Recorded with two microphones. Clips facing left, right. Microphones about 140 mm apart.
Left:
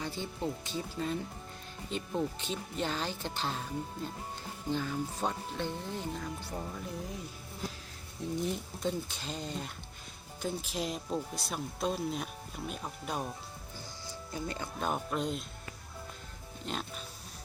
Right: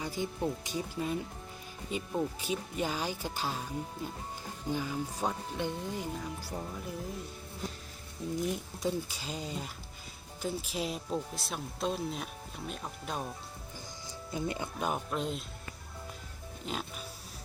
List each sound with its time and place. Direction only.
0.0 s speech: 10° right (ahead or behind)
4.7 s speech: 10° right (ahead or behind)
8.4 s speech: 10° right (ahead or behind)
14.3 s speech: 15° right (ahead or behind)
14.8 s speech: centre (ahead or behind)
16.7 s speech: 5° right (ahead or behind)